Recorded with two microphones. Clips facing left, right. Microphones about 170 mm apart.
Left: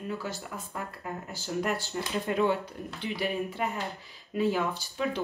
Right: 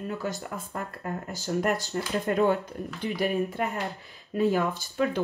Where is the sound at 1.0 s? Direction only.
45° right (ahead or behind).